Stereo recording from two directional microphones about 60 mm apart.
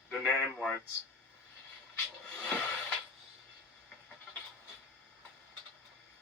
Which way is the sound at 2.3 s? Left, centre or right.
Left.